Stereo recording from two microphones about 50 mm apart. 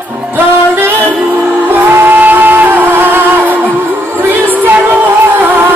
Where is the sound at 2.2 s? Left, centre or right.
Right.